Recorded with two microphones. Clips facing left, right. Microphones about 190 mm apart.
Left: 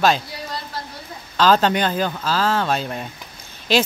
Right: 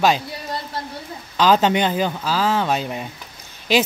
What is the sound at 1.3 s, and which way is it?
Speech, 15° right (ahead or behind).